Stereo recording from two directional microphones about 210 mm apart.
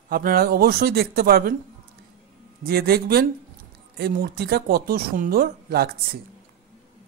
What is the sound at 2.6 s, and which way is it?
Speech, 45° right (ahead or behind).